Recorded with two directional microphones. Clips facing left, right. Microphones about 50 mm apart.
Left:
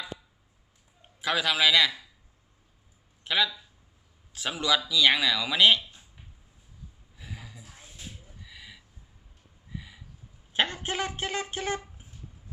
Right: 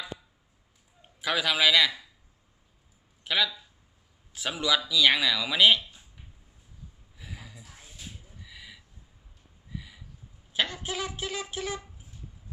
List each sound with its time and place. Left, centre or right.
1.0 s a man's voice: centre
3.2 s speech: centre
5.9 s a sound: centre
10.5 s speech: left